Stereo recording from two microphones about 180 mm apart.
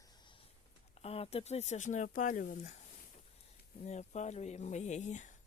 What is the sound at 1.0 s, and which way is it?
Speech, 35° left (ahead or behind).